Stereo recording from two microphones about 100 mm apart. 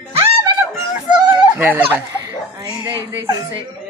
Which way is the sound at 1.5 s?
20° right (ahead or behind).